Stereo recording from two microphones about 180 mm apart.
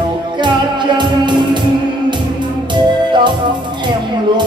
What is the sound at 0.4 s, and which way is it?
Music, 25° right (ahead or behind).